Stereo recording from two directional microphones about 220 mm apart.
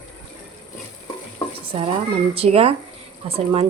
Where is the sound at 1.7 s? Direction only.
25° right (ahead or behind).